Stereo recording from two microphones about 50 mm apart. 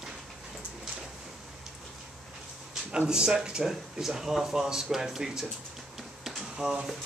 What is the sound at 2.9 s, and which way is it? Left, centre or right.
Speech, centre.